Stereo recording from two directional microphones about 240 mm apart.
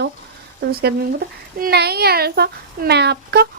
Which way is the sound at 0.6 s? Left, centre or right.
Right.